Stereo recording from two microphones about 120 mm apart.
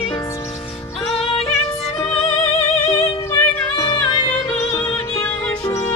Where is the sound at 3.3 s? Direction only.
30° left (ahead or behind).